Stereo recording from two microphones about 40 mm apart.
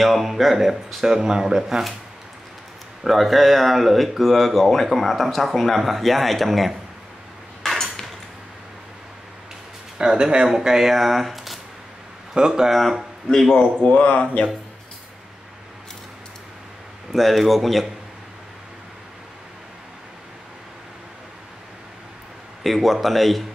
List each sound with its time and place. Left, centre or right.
0.0 s speech: centre
3.0 s speech: centre
7.7 s a sound: centre
9.9 s speech: centre
10.5 s speech: centre
12.4 s speech: centre
12.7 s speech: centre
13.3 s speech: centre
13.8 s speech: left
17.1 s speech: centre
22.6 s speech: centre